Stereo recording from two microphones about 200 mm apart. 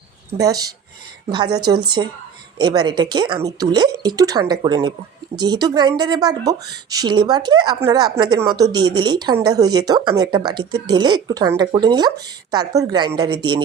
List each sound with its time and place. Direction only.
0.3 s speech: 20° right (ahead or behind)